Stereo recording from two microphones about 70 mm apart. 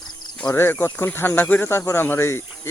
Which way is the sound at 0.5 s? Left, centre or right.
Left.